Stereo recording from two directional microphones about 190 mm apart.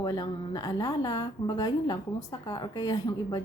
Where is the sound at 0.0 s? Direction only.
20° left (ahead or behind).